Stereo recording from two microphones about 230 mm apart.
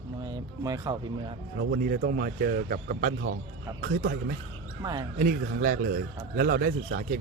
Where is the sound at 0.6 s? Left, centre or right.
Centre.